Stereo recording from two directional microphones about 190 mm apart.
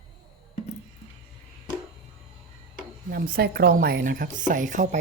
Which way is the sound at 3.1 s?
55° right (ahead or behind).